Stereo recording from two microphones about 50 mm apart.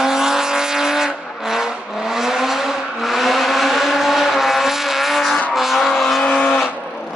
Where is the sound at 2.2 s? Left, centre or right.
Centre.